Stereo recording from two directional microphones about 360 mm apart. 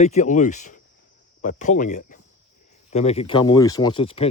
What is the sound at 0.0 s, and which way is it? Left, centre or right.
Speech, centre.